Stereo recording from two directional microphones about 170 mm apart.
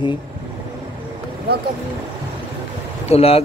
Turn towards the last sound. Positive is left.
turn(degrees=35)  # may be behind; listen again after turning